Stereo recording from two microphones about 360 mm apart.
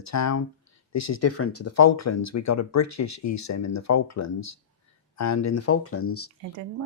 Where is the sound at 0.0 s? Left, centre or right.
Left.